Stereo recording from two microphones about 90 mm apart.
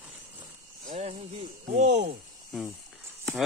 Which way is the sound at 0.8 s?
65° right (ahead or behind).